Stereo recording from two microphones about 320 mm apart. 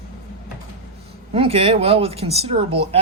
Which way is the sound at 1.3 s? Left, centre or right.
Centre.